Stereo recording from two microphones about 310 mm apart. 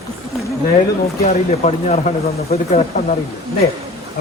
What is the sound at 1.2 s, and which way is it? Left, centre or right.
Speech, centre.